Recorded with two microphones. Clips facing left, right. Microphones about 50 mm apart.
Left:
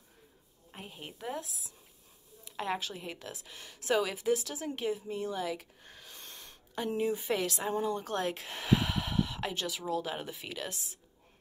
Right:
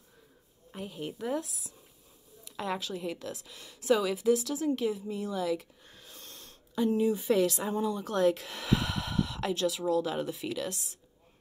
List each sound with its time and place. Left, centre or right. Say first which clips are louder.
0.7 s speech: right 8 dB; left
2.5 s a sound: right 1 dB; left
2.9 s a woman's voice: right 6 dB; left